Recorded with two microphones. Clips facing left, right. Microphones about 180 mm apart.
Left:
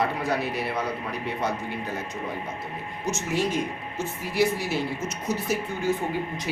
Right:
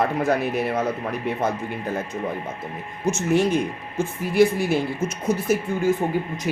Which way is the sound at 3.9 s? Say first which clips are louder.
Right 7 dB; 55° right (ahead or behind).